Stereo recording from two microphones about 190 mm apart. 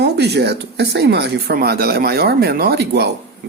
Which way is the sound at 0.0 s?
60° right (ahead or behind).